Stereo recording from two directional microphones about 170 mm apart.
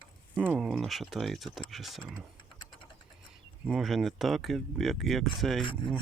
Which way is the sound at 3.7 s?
Centre (ahead or behind).